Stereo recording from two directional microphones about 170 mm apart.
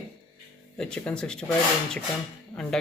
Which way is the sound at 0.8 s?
5° left (ahead or behind).